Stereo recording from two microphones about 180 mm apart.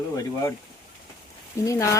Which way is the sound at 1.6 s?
15° left (ahead or behind).